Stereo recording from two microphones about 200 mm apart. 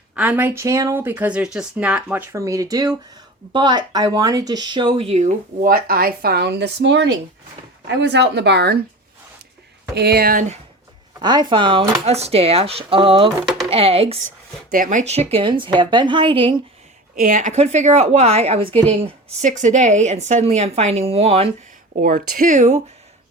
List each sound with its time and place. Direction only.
0.2 s speech: 10° right (ahead or behind); by 8.8 s 55° right (ahead or behind)
9.9 s speech: 55° right (ahead or behind)
11.2 s speech: 20° right (ahead or behind)
14.7 s a woman's voice: 40° right (ahead or behind)
15.3 s speech: 25° right (ahead or behind)
17.2 s a woman's voice: 40° right (ahead or behind)
22.0 s a woman's voice: 45° right (ahead or behind)